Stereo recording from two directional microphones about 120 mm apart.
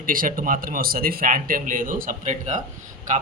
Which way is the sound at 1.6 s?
90° right.